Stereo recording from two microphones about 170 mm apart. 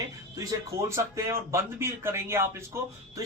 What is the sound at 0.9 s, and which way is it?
A man's voice, 15° right (ahead or behind).